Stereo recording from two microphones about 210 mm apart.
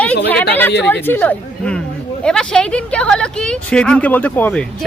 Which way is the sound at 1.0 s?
10° left (ahead or behind).